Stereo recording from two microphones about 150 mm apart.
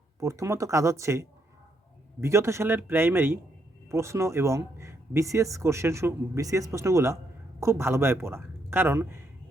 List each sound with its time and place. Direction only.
0.2 s a man's voice: 20° right (ahead or behind)